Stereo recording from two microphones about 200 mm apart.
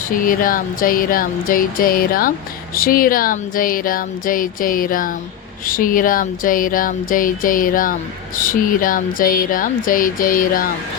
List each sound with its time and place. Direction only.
0.3 s speech: 45° left (ahead or behind)